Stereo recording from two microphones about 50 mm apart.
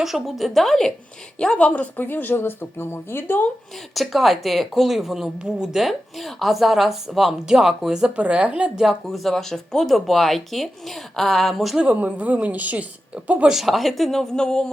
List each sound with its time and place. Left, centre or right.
0.0 s speech: centre
1.5 s speech: left
2.0 s speech: left
2.3 s speech: left
3.9 s speech: centre
5.4 s speech: centre
5.7 s speech: centre
8.1 s speech: right
8.8 s speech: centre
11.9 s a woman's voice: right
13.5 s speech: centre